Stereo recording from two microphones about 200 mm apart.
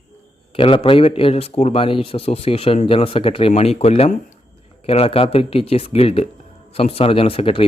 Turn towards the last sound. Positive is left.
turn(degrees=30)  # may be behind; listen again after turning